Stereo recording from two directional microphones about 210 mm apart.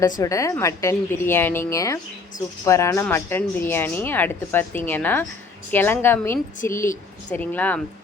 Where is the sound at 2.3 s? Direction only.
40° left (ahead or behind).